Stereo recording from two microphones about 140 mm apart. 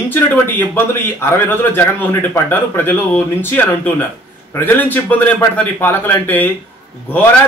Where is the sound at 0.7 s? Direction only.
20° left (ahead or behind).